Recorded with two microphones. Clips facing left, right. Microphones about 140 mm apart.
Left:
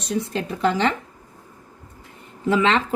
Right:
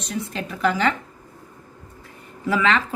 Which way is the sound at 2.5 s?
25° left (ahead or behind).